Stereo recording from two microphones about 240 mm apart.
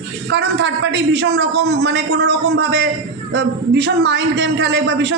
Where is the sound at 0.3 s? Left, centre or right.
Right.